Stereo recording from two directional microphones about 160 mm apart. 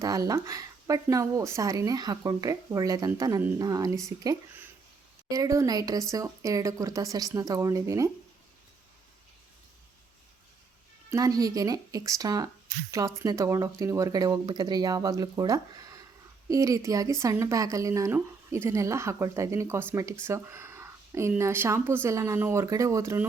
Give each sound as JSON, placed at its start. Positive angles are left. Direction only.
{"t": 0.0, "sound": "speech", "side_deg": -20}
{"t": 5.3, "sound": "speech", "side_deg": -20}
{"t": 11.1, "sound": "speech", "side_deg": -20}